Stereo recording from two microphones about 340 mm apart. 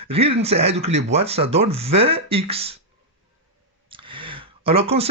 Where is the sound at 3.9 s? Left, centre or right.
Centre.